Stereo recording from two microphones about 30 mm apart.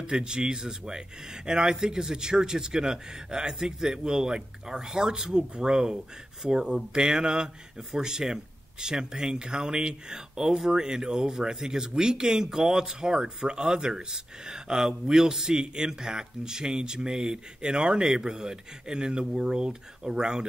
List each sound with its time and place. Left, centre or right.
0.1 s speech: right
17.6 s speech: right